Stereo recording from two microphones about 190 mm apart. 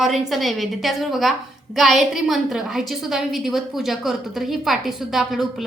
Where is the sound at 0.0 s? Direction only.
Centre (ahead or behind).